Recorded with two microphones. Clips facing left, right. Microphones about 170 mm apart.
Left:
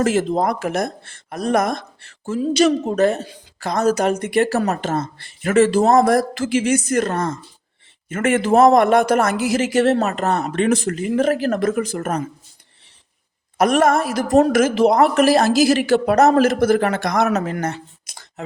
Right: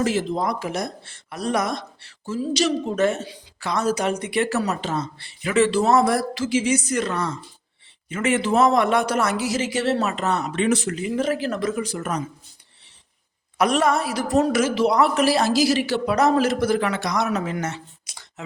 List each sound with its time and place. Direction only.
0.0 s a woman's voice: 50° left (ahead or behind)
13.6 s a woman's voice: 50° left (ahead or behind)